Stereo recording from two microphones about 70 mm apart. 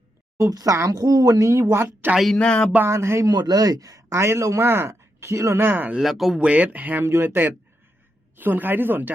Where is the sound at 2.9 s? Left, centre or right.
Right.